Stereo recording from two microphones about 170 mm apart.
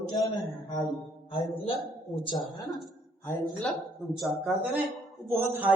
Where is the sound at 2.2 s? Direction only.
30° left (ahead or behind).